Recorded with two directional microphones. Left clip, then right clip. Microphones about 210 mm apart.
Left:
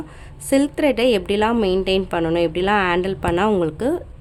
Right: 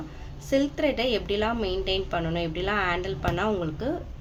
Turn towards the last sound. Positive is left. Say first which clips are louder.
# left 9 dB
turn(degrees=50)  # may be behind; listen again after turning